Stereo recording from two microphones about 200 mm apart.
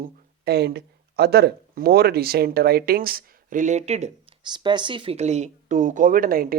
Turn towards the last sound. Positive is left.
turn(degrees=-45)  # may be behind; listen again after turning